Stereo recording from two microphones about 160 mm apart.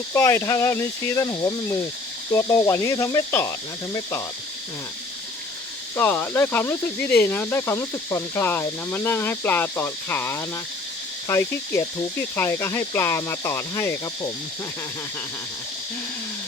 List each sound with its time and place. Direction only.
0.1 s speech: 15° left (ahead or behind)
6.0 s speech: 10° left (ahead or behind)